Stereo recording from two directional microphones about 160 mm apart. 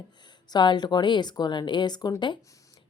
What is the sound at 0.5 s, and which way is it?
Speech, 25° left (ahead or behind).